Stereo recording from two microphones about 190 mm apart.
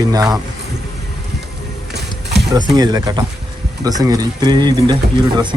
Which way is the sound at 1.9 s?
60° right (ahead or behind).